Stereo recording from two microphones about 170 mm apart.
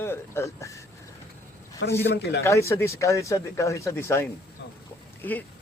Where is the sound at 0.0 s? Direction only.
15° left (ahead or behind).